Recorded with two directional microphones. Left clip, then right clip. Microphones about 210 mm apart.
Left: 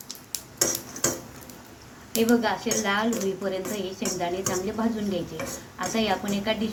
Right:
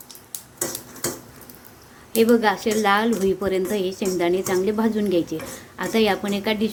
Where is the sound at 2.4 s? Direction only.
50° right (ahead or behind).